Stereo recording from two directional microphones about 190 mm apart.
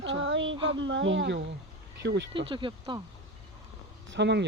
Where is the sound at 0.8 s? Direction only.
80° right.